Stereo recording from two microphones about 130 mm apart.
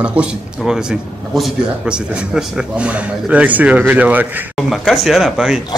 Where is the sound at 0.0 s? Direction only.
10° right (ahead or behind).